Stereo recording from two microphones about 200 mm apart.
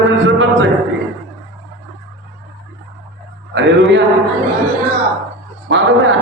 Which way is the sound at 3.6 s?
60° right (ahead or behind).